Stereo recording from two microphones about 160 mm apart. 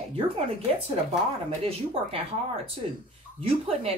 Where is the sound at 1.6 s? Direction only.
35° right (ahead or behind).